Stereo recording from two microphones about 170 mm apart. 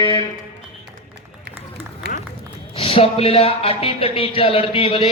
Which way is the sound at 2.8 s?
35° left (ahead or behind).